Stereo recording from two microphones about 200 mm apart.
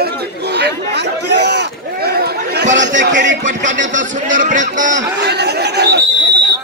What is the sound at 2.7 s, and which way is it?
Speech, 60° right (ahead or behind).